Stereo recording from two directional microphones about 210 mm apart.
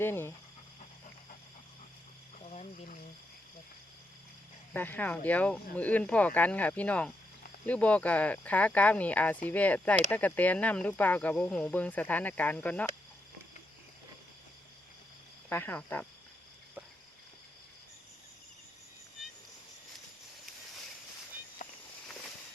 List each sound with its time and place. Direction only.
0.0 s speech: 10° left (ahead or behind)
2.5 s a sound: 35° left (ahead or behind)
4.7 s speech: 10° left (ahead or behind)
15.4 s speech: 10° left (ahead or behind)
21.6 s walk: 35° left (ahead or behind)